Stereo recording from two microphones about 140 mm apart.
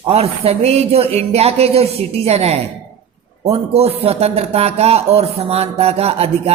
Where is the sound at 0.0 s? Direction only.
45° right (ahead or behind).